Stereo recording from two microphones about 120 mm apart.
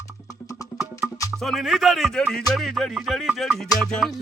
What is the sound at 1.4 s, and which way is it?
Music, centre (ahead or behind).